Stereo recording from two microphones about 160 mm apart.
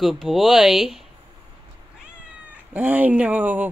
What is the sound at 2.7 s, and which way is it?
A woman's voice, 10° right (ahead or behind).